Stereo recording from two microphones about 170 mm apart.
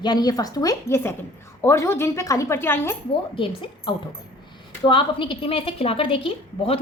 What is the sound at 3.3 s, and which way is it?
A woman's voice, 30° left (ahead or behind).